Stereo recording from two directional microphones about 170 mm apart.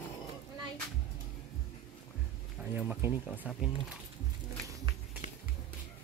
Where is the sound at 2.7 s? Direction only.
10° right (ahead or behind).